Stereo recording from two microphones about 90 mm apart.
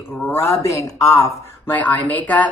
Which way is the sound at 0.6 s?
35° left (ahead or behind).